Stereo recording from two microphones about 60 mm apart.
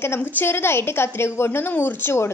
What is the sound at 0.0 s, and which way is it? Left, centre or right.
A woman's voice, left.